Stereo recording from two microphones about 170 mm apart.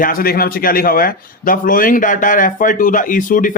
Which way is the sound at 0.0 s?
60° left (ahead or behind).